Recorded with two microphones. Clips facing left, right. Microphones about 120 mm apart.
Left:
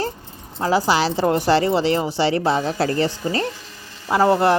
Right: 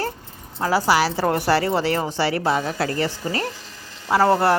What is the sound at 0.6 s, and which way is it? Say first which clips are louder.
A woman's voice: left 1 dB; 20° left (ahead or behind).